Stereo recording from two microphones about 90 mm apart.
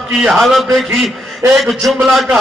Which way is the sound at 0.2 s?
Centre (ahead or behind).